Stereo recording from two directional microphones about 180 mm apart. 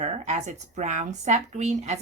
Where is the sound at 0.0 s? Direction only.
40° right (ahead or behind).